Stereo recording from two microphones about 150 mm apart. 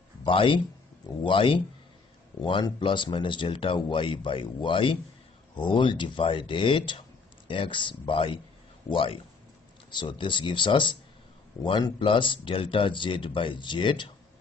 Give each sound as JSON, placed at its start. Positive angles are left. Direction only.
{"t": 0.2, "sound": "speech", "side_deg": 35}